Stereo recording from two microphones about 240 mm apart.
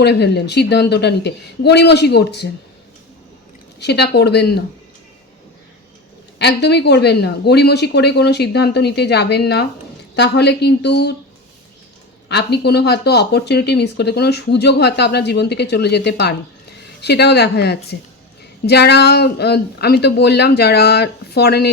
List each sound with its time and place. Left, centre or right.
0.0 s speech: left
3.8 s speech: left
6.4 s speech: left
12.3 s speech: left